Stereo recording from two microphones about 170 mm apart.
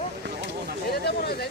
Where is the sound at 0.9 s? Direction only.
70° left (ahead or behind).